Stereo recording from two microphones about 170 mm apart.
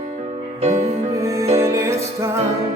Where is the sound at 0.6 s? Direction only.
40° right (ahead or behind).